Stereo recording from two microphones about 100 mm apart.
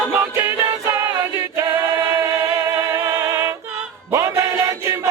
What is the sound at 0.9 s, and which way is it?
Choir, 25° right (ahead or behind).